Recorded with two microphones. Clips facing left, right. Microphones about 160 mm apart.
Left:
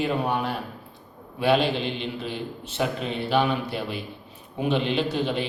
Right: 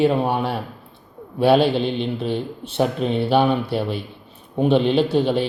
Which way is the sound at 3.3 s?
30° right (ahead or behind).